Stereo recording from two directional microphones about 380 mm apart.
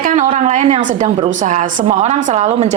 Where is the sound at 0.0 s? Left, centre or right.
Centre.